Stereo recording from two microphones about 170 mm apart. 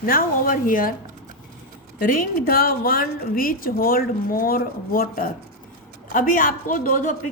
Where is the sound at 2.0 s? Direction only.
60° left (ahead or behind).